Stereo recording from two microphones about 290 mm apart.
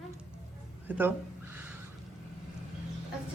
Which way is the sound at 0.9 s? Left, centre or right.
Centre.